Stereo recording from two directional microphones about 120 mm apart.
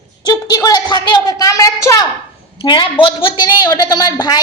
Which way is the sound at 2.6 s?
45° left (ahead or behind).